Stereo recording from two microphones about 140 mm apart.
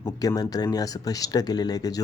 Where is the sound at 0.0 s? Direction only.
25° left (ahead or behind).